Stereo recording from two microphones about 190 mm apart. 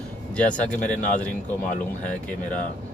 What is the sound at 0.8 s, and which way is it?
Speech, 40° left (ahead or behind).